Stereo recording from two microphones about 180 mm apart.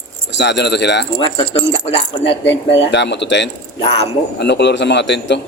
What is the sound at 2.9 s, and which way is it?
A man's voice, 75° left (ahead or behind).